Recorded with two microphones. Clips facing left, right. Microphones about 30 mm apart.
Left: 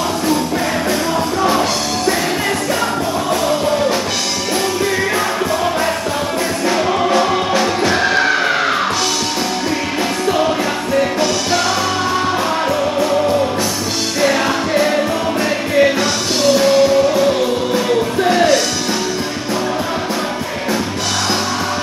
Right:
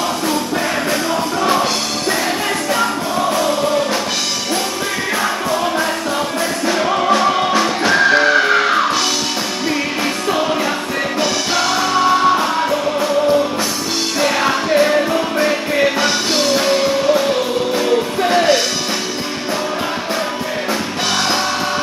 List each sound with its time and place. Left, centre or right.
6.7 s music: centre
14.3 s music: centre
16.0 s music: centre